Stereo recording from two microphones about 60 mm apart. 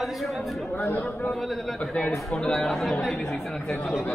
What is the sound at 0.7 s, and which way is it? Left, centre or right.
Speech, left.